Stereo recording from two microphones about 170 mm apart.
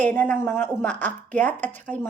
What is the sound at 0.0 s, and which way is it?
Speech, 10° left (ahead or behind).